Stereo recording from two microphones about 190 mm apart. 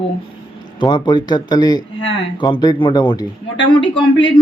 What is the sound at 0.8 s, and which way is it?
Speech, 25° left (ahead or behind).